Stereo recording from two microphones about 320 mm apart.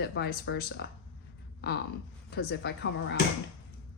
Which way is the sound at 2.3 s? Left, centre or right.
Left.